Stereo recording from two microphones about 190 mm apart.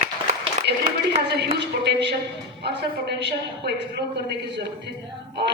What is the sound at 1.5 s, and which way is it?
A woman's voice, 65° right (ahead or behind).